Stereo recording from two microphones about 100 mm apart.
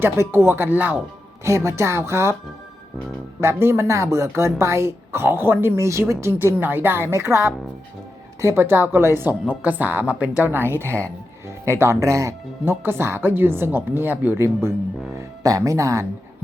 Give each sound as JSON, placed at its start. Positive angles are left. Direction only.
{"t": 0.0, "sound": "a woman's voice", "side_deg": -20}
{"t": 1.5, "sound": "a woman's voice", "side_deg": -30}
{"t": 3.4, "sound": "a woman's voice", "side_deg": -25}